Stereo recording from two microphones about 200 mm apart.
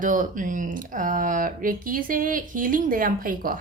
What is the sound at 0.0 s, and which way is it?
Speech, 40° right (ahead or behind).